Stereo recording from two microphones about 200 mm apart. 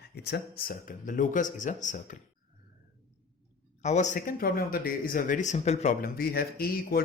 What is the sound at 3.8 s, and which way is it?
Speech, 35° left (ahead or behind).